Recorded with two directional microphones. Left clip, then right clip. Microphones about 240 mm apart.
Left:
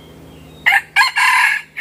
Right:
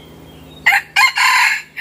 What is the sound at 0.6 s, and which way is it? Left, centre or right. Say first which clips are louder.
Chicken: right 1 dB; centre.